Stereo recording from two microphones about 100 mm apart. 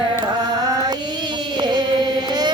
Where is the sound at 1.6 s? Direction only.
50° right (ahead or behind).